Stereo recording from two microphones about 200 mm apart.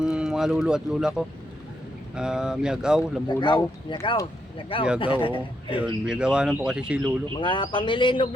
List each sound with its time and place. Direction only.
0.0 s speech: 5° right (ahead or behind)
3.2 s speech: 20° left (ahead or behind)
5.8 s speech: 5° right (ahead or behind)
7.3 s speech: 25° left (ahead or behind)